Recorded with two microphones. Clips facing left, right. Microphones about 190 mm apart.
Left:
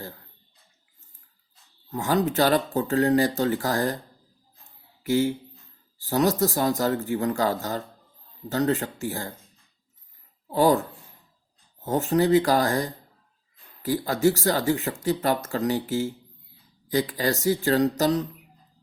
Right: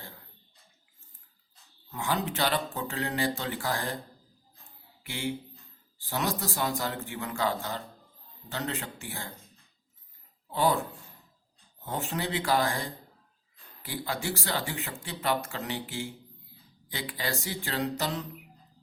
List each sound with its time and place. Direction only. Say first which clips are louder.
1.9 s speech: left 7 dB; 40° left (ahead or behind)
5.0 s speech: left 11 dB; 40° left (ahead or behind)
10.5 s speech: left 7 dB; 40° left (ahead or behind)
11.9 s speech: left 12 dB; 40° left (ahead or behind)